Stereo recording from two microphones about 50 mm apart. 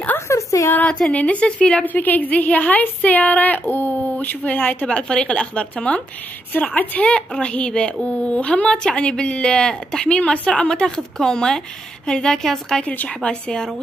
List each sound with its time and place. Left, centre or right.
0.3 s a sound: left
1.1 s speech: left
1.9 s speech: left
4.8 s a woman's voice: centre
12.8 s speech: left
13.3 s a woman's voice: centre